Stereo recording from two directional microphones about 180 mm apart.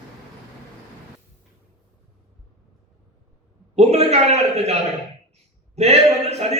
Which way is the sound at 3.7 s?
35° right (ahead or behind).